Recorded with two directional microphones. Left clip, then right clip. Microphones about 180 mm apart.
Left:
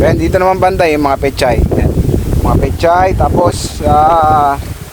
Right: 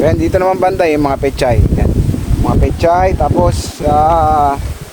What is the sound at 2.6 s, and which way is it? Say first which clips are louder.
Speech: left 1 dB; 20° left (ahead or behind).